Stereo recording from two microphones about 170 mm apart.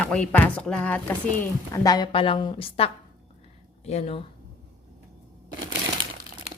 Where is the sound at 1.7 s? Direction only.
20° left (ahead or behind); by 4.2 s 35° left (ahead or behind).